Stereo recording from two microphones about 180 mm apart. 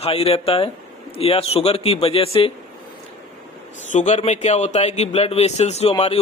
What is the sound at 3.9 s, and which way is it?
A man's voice, 40° left (ahead or behind).